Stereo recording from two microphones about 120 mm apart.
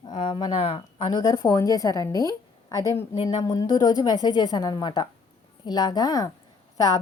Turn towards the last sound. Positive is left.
turn(degrees=30)  # may be behind; listen again after turning